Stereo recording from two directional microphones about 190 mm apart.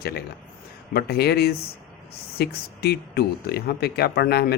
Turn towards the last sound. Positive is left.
turn(degrees=55)  # may be behind; listen again after turning